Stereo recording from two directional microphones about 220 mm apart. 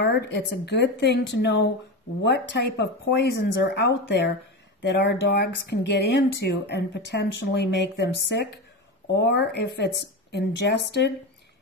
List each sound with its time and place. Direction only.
0.0 s speech: 50° left (ahead or behind)